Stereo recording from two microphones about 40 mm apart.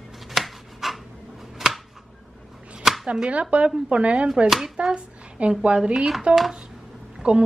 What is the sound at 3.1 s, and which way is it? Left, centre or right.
Speech, right.